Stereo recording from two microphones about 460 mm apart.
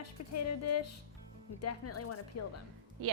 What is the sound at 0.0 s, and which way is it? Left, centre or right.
Speech, left.